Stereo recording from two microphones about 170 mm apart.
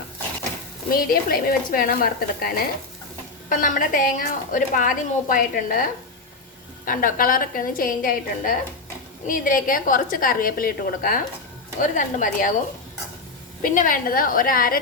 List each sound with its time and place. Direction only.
0.9 s a woman's voice: 60° left (ahead or behind)
3.5 s a woman's voice: 50° left (ahead or behind)
13.6 s a woman's voice: 55° left (ahead or behind)